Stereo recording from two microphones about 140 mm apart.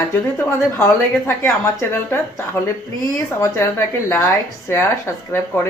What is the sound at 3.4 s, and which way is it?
A woman's voice, 15° left (ahead or behind).